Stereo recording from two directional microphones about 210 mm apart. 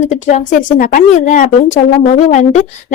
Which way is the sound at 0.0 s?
35° left (ahead or behind).